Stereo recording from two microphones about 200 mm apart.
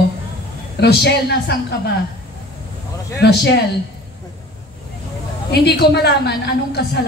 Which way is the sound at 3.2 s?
55° left (ahead or behind).